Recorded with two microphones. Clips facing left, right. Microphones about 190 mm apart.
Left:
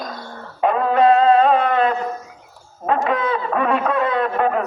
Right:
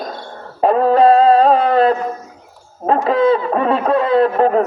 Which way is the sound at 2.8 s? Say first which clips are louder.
Right 6 dB; 35° right (ahead or behind).